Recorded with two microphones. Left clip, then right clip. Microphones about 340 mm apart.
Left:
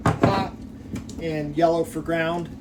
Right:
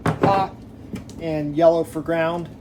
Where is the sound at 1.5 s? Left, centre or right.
Centre.